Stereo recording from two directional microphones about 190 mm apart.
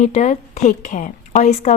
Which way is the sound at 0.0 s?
40° left (ahead or behind).